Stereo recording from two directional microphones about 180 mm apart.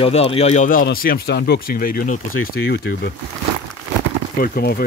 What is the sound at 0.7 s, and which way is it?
Speech, 55° left (ahead or behind).